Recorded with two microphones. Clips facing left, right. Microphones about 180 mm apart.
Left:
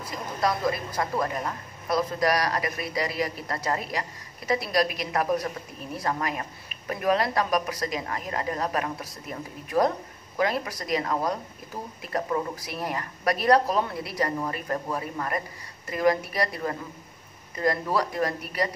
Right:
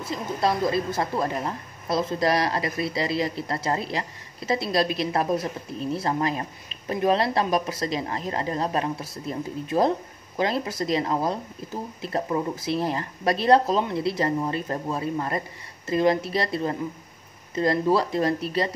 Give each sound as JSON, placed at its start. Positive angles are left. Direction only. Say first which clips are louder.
{"t": 0.0, "sound": "speech", "louder": "right 3 dB", "side_deg": -25}